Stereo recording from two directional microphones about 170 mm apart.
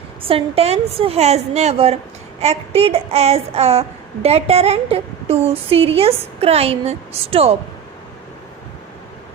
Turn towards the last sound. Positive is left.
turn(degrees=-35)  # may be behind; listen again after turning